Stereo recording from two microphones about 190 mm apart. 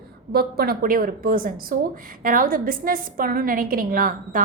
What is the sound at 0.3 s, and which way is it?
A woman's voice, 55° right (ahead or behind).